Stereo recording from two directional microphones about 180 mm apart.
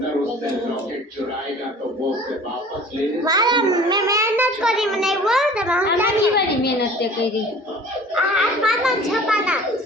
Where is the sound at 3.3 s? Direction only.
25° right (ahead or behind).